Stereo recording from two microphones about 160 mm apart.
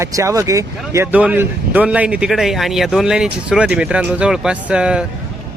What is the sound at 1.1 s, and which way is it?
Speech, 10° right (ahead or behind).